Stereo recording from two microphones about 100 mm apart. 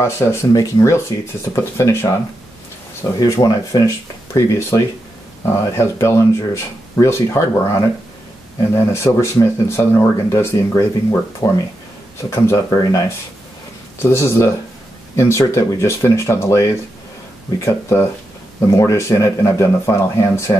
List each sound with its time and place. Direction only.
0.0 s speech: 25° left (ahead or behind)
3.2 s speech: 35° left (ahead or behind)
8.7 s speech: 25° left (ahead or behind)
14.1 s speech: 30° left (ahead or behind)